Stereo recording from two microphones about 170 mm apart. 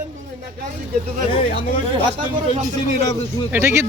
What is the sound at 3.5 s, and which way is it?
Speech, 15° right (ahead or behind).